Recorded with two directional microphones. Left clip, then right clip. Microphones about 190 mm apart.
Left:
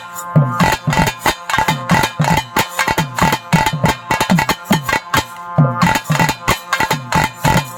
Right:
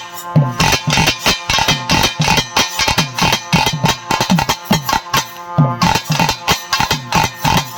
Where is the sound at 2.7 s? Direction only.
30° left (ahead or behind).